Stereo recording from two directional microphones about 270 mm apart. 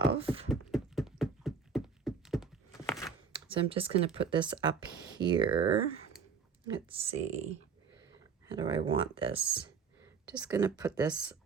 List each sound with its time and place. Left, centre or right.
0.0 s beatboxing: centre
0.7 s a sound: centre
3.3 s a woman's voice: centre
6.8 s speech: right
8.5 s speech: centre
10.2 s a woman's voice: centre